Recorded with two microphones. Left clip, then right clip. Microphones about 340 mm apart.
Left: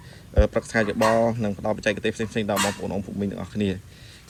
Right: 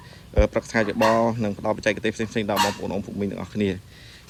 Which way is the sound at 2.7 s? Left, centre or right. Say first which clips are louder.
Right 1 dB; right.